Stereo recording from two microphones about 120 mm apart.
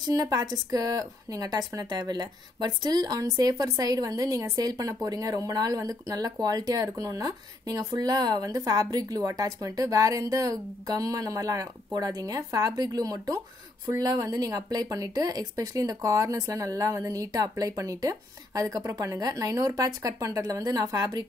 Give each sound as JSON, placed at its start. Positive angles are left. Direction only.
{"t": 0.0, "sound": "a woman's voice", "side_deg": -30}